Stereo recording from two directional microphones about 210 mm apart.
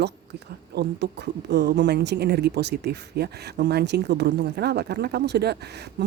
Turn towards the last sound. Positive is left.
turn(degrees=-50)  # may be behind; listen again after turning